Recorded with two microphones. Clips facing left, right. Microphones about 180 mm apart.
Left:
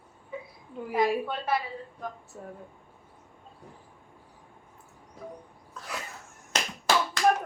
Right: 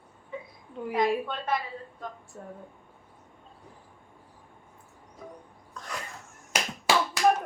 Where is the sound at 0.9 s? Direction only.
5° left (ahead or behind).